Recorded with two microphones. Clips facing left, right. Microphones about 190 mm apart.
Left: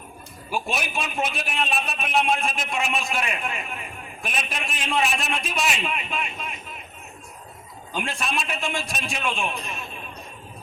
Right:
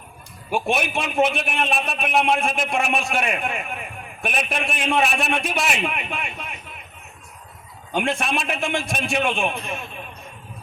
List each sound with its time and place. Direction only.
0.5 s a man's voice: 60° right (ahead or behind)
7.9 s a man's voice: 60° right (ahead or behind)